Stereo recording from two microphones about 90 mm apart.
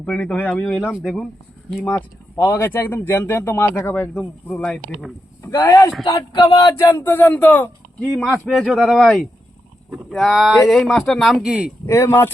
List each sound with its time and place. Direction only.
0.0 s speech: 15° left (ahead or behind)
0.6 s speech: 10° left (ahead or behind)
2.3 s speech: 25° left (ahead or behind)
4.1 s speech: 5° left (ahead or behind)
5.5 s speech: 40° left (ahead or behind); by 7.7 s 20° left (ahead or behind)
8.3 s speech: 5° right (ahead or behind)
11.4 s speech: 10° right (ahead or behind)
11.9 s speech: 30° left (ahead or behind)